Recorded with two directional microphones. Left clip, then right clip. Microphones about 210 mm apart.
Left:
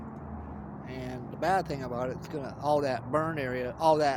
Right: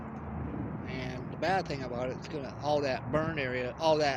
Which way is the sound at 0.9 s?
25° left (ahead or behind).